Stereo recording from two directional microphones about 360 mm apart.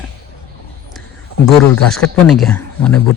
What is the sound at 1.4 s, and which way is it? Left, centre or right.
A man's voice, centre.